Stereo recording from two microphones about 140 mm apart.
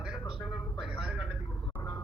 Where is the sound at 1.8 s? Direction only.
20° left (ahead or behind).